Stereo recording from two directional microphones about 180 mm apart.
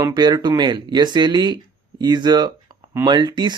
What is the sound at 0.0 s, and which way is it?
Speech, 20° right (ahead or behind).